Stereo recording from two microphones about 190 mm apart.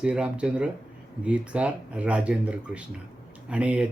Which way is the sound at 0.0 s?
5° right (ahead or behind).